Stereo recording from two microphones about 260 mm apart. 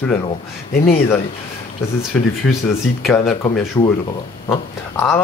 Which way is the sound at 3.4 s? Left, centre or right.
Centre.